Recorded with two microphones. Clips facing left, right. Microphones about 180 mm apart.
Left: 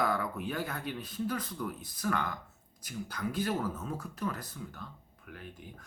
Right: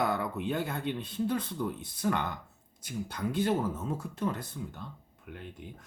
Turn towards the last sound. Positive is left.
turn(degrees=-25)  # may be behind; listen again after turning